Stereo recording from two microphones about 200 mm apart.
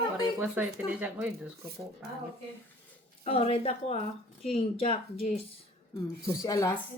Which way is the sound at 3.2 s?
30° left (ahead or behind).